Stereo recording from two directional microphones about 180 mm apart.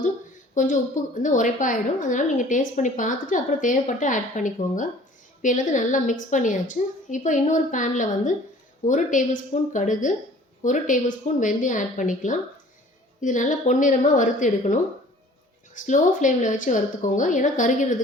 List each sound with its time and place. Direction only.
0.5 s a woman's voice: 45° left (ahead or behind)